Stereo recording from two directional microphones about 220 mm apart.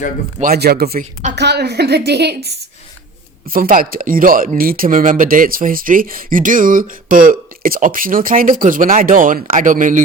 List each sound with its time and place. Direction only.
0.3 s a woman's voice: 40° right (ahead or behind)
3.5 s speech: 40° right (ahead or behind)